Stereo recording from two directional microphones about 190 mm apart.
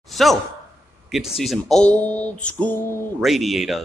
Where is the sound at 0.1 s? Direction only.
Centre (ahead or behind).